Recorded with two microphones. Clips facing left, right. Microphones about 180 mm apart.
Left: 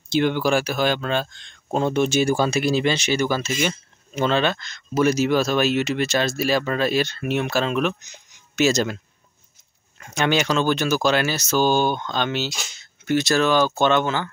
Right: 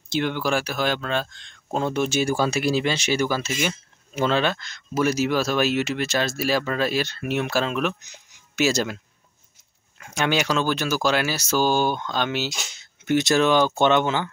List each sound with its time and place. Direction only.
0.1 s speech: centre (ahead or behind); by 14.3 s 15° right (ahead or behind)